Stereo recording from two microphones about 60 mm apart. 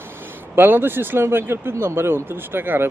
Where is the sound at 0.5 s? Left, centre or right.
Right.